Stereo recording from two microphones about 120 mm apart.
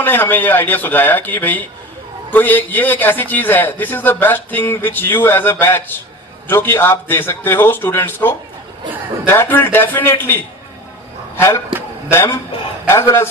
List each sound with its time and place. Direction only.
0.0 s a man's voice: 15° left (ahead or behind)